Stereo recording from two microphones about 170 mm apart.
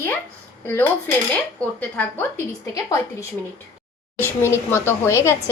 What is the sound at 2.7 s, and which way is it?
A woman's voice, 20° left (ahead or behind).